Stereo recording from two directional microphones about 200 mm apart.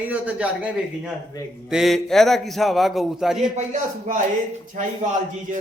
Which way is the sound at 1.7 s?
Centre (ahead or behind).